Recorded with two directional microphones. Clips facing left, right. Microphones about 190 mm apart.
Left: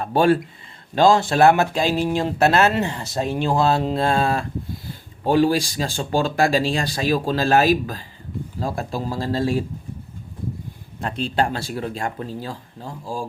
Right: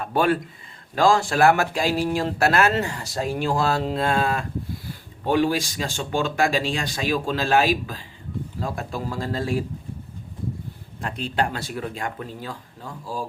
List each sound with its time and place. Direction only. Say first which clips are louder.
0.0 s speech: left 4 dB; 30° left (ahead or behind)
11.0 s speech: left 3 dB; 30° left (ahead or behind)